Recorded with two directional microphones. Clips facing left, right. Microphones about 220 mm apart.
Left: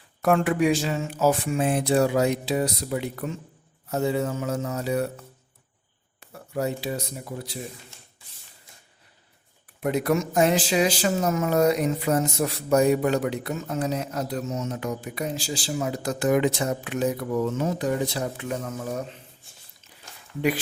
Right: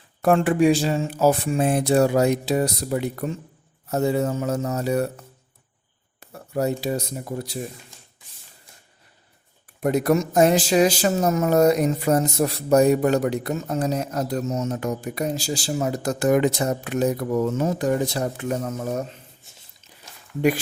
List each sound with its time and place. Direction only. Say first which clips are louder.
0.2 s speech: right 3 dB; 30° right (ahead or behind)
6.1 s speech: right 4 dB; 40° right (ahead or behind)
9.8 s speech: right 4 dB; 40° right (ahead or behind)